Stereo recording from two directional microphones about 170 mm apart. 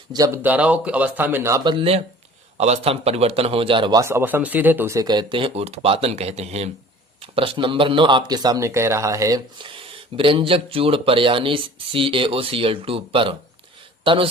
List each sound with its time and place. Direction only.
0.1 s speech: 25° right (ahead or behind)
0.4 s a man's voice: 10° right (ahead or behind); by 4.0 s 30° right (ahead or behind)
4.0 s a man's voice: 15° right (ahead or behind); by 14.3 s 30° right (ahead or behind)